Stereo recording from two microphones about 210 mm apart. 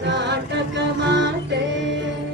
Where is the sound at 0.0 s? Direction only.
55° right (ahead or behind).